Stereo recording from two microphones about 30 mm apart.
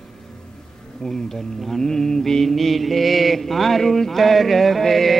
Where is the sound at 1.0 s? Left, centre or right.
Centre.